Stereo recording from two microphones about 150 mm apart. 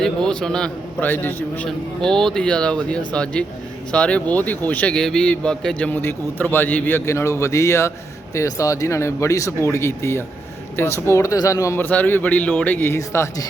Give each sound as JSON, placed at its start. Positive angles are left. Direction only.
{"t": 0.0, "sound": "a man's voice", "side_deg": 5}